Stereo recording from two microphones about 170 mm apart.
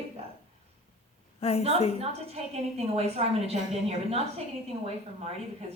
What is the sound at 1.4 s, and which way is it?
Speech, 35° left (ahead or behind).